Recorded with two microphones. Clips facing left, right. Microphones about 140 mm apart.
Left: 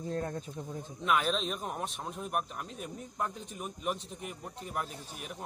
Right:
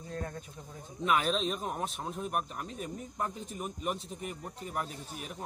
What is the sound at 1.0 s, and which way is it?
Speech, centre (ahead or behind).